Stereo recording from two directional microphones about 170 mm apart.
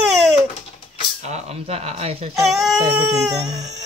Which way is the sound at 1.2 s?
40° right (ahead or behind).